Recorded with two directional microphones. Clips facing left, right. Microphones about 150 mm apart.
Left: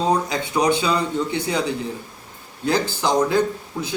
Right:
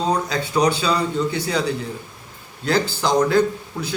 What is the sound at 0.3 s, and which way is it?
Speech, 20° left (ahead or behind).